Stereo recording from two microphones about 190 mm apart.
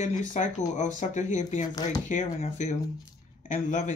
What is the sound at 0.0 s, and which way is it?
Speech, 40° left (ahead or behind).